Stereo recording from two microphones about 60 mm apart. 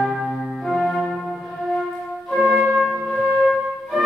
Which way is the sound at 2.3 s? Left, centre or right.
Centre.